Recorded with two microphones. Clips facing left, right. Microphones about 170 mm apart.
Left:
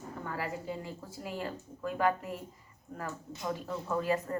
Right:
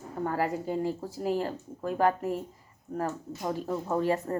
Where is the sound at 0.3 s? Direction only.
45° right (ahead or behind).